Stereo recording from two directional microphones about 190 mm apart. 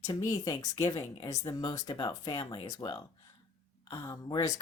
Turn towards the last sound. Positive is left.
turn(degrees=20)  # may be behind; listen again after turning